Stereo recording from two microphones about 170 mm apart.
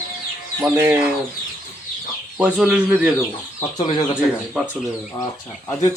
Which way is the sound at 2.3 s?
10° right (ahead or behind).